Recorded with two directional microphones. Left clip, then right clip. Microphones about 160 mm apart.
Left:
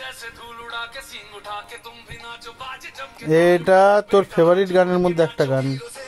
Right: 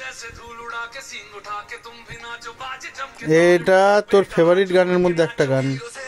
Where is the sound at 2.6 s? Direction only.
5° right (ahead or behind).